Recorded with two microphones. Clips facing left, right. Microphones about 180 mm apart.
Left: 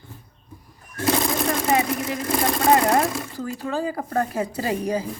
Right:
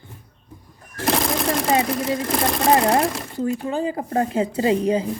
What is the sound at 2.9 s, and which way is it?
Speech, 25° right (ahead or behind).